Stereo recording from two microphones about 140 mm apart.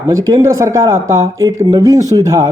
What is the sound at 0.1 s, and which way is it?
Speech, 25° right (ahead or behind).